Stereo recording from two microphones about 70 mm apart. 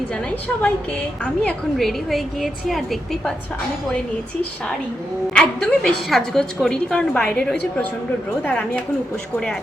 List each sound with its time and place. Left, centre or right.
0.1 s a woman's voice: centre
1.8 s a woman's voice: centre
5.3 s a woman's voice: centre
7.1 s a woman's voice: left